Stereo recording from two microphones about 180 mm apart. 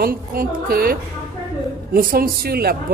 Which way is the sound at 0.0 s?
55° right (ahead or behind).